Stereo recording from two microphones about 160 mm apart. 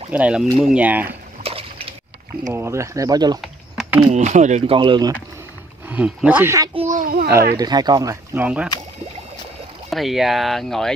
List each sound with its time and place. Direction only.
0.1 s speech: 5° right (ahead or behind)
1.4 s slosh: 35° right (ahead or behind)
2.5 s speech: 15° right (ahead or behind)
3.3 s typing: centre (ahead or behind)
4.1 s speech: 45° right (ahead or behind)
4.7 s speech: 30° right (ahead or behind)
5.9 s speech: 10° right (ahead or behind)
6.7 s a child's voice: 40° right (ahead or behind)
7.0 s a child's voice: 65° right (ahead or behind)
7.5 s speech: 25° right (ahead or behind)
8.4 s speech: 5° right (ahead or behind)
9.8 s speech: centre (ahead or behind)